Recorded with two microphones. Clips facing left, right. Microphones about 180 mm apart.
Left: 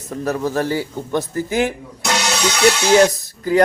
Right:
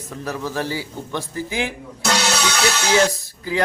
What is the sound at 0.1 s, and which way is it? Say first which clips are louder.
Speech: left 6 dB; 45° left (ahead or behind).